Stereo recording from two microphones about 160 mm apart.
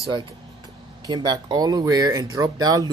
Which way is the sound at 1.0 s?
25° right (ahead or behind).